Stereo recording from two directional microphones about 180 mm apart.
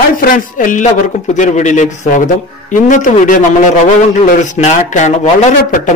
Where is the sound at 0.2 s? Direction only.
50° left (ahead or behind).